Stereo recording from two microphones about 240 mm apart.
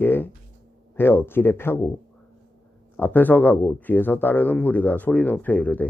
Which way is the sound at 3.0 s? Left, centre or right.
Centre.